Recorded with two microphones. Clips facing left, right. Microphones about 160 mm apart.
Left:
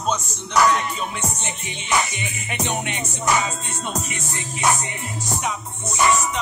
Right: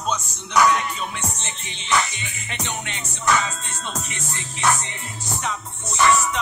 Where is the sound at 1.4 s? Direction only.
15° left (ahead or behind).